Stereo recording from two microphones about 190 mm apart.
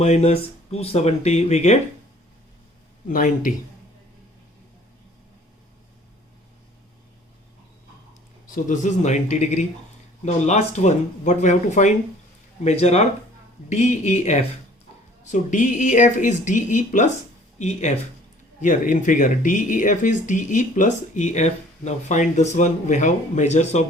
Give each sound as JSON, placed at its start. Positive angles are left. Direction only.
{"t": 0.0, "sound": "speech", "side_deg": 35}
{"t": 3.1, "sound": "speech", "side_deg": 40}
{"t": 8.4, "sound": "speech", "side_deg": 40}